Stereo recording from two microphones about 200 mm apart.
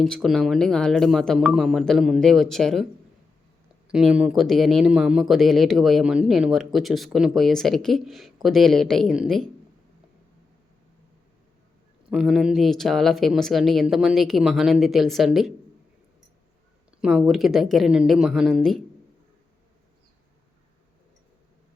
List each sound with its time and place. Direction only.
0.0 s speech: centre (ahead or behind)
3.8 s speech: 5° right (ahead or behind)
12.1 s speech: 5° right (ahead or behind)
17.0 s speech: 5° right (ahead or behind)